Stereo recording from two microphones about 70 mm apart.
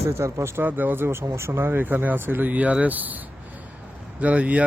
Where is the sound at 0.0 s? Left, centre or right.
Right.